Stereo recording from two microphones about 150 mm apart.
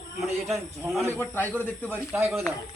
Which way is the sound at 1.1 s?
15° left (ahead or behind).